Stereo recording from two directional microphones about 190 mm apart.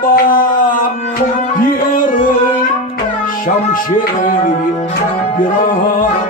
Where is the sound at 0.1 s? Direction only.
45° left (ahead or behind).